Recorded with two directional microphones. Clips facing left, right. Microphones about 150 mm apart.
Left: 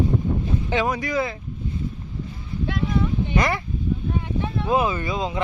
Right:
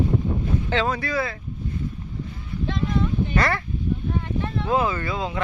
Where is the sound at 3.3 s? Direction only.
15° left (ahead or behind).